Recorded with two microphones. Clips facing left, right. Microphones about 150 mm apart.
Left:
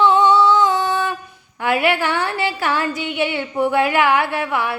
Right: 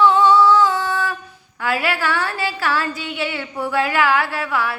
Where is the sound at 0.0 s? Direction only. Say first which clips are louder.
Even; 20° left (ahead or behind).